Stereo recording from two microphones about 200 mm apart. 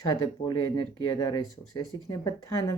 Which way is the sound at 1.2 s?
20° left (ahead or behind).